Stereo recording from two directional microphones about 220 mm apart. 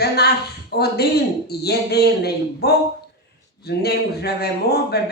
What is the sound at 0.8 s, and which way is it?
A man's voice, 45° left (ahead or behind).